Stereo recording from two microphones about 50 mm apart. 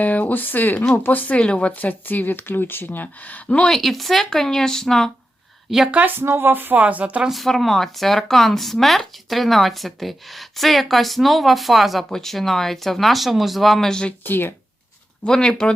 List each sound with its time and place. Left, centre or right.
0.0 s speech: left
3.4 s speech: left
3.7 s speech: centre
5.7 s speech: centre
6.2 s speech: right
6.8 s a woman's voice: right
7.3 s speech: centre
14.3 s speech: left
15.2 s speech: centre